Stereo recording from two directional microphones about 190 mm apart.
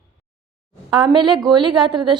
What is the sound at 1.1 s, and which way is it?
Speech, 25° right (ahead or behind).